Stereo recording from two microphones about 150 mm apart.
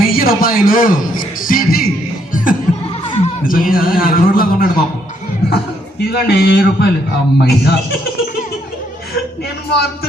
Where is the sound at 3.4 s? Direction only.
70° left (ahead or behind).